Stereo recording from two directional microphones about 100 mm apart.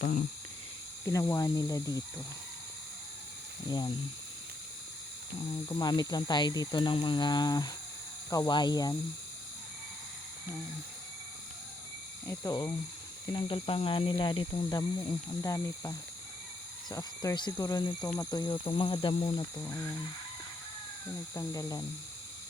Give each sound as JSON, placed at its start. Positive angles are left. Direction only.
{"t": 1.0, "sound": "speech", "side_deg": 35}
{"t": 3.7, "sound": "speech", "side_deg": 45}
{"t": 5.7, "sound": "speech", "side_deg": 45}
{"t": 12.2, "sound": "speech", "side_deg": 25}
{"t": 12.5, "sound": "speech", "side_deg": 40}
{"t": 13.3, "sound": "speech", "side_deg": 60}
{"t": 15.4, "sound": "speech", "side_deg": 30}
{"t": 19.5, "sound": "speech", "side_deg": 25}
{"t": 21.3, "sound": "speech", "side_deg": 35}